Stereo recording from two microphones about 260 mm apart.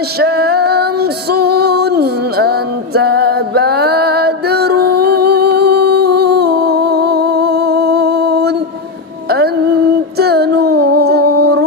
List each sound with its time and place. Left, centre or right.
0.2 s music: right
5.5 s humming: right
5.9 s humming: right
6.4 s music: right
10.8 s humming: right